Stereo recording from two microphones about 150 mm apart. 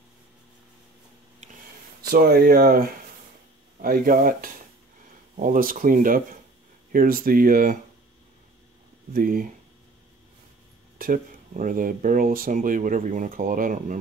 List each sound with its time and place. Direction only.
2.0 s speech: 80° right
9.1 s speech: 70° right (ahead or behind)
11.0 s speech: 65° right (ahead or behind)